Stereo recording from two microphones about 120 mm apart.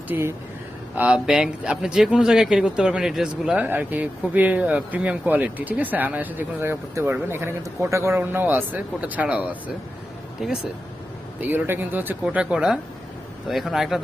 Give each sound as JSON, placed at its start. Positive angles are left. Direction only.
{"t": 0.1, "sound": "speech", "side_deg": -20}
{"t": 0.9, "sound": "a man's voice", "side_deg": -10}
{"t": 11.3, "sound": "a man's voice", "side_deg": -15}